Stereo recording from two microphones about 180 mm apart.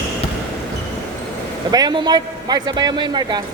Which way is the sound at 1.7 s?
20° right (ahead or behind).